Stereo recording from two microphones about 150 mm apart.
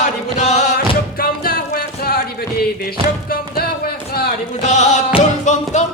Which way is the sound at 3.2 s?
80° left.